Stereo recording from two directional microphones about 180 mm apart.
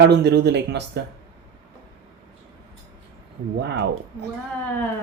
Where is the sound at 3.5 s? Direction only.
65° right (ahead or behind).